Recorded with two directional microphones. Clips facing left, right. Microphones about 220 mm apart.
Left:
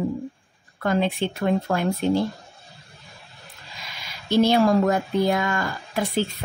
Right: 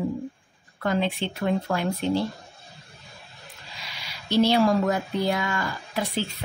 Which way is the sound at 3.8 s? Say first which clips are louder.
Left 2 dB; 50° left (ahead or behind).